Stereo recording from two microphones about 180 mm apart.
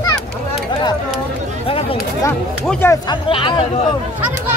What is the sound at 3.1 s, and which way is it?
Speech, 30° left (ahead or behind).